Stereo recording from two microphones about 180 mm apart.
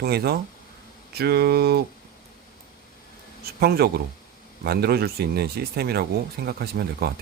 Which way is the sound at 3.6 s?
60° right (ahead or behind).